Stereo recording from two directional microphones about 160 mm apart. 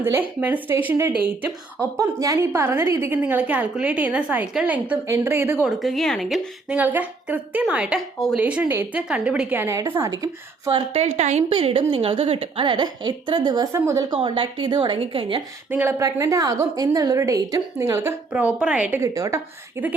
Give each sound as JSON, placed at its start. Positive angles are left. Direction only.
{"t": 0.0, "sound": "speech", "side_deg": -15}
{"t": 5.6, "sound": "speech", "side_deg": 0}
{"t": 10.7, "sound": "a woman's voice", "side_deg": -35}
{"t": 14.2, "sound": "a woman's voice", "side_deg": -30}
{"t": 15.7, "sound": "a woman's voice", "side_deg": -15}
{"t": 18.3, "sound": "speech", "side_deg": -10}